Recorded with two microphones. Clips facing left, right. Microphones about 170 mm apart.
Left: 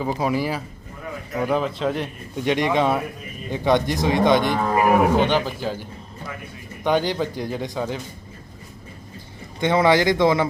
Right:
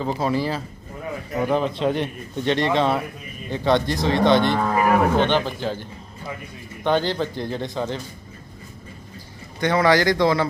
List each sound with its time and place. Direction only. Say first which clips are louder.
0.0 s speech: even; 10° left (ahead or behind)
6.8 s speech: even; 10° left (ahead or behind)
9.6 s speech: left 1 dB; 20° left (ahead or behind)